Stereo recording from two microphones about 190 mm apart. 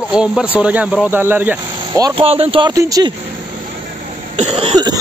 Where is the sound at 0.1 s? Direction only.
5° right (ahead or behind).